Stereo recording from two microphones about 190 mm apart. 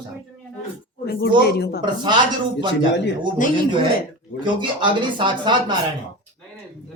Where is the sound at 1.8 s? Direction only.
25° right (ahead or behind).